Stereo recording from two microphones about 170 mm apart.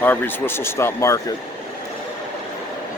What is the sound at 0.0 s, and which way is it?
Speech, 10° left (ahead or behind).